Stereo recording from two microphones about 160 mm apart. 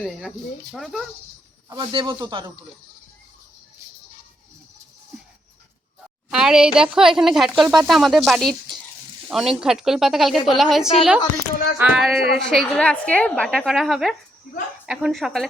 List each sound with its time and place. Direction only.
0.2 s a woman's voice: centre (ahead or behind)
1.7 s speech: 30° right (ahead or behind)
6.3 s a woman's voice: 5° right (ahead or behind)